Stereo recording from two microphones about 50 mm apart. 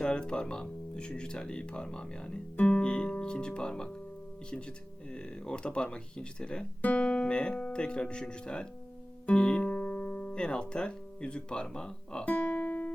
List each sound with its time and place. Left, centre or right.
0.0 s speech: centre
5.1 s speech: centre
12.2 s music: left